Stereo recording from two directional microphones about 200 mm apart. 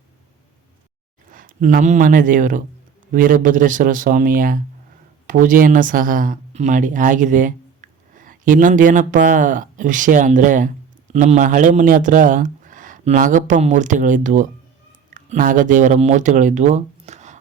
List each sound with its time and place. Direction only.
1.3 s speech: 45° right (ahead or behind)